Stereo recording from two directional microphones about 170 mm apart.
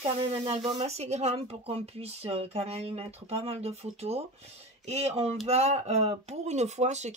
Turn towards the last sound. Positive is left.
turn(degrees=-40)  # may be behind; listen again after turning